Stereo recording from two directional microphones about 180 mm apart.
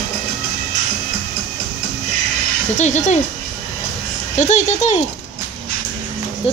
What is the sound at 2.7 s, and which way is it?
Speech, 40° left (ahead or behind).